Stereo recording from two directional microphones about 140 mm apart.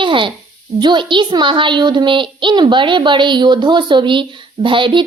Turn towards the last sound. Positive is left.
turn(degrees=-35)  # may be behind; listen again after turning